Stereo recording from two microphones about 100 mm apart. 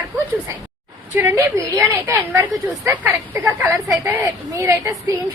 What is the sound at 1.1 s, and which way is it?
Speech, 25° right (ahead or behind).